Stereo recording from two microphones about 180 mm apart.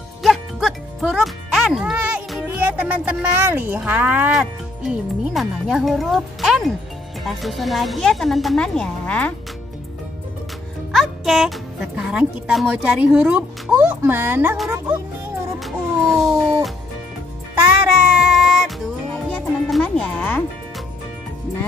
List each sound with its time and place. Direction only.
0.2 s music: centre (ahead or behind)
7.2 s a woman's voice: centre (ahead or behind)
10.9 s speech: centre (ahead or behind)
17.6 s music: 5° right (ahead or behind); by 20.4 s 10° left (ahead or behind)